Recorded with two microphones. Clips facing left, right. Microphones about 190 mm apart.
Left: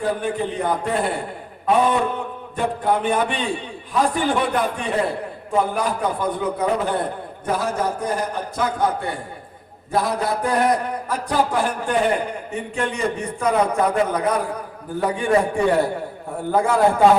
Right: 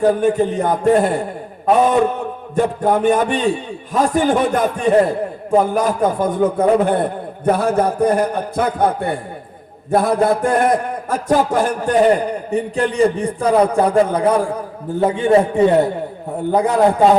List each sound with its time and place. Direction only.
0.0 s a man's voice: 45° right (ahead or behind); by 17.0 s 20° right (ahead or behind)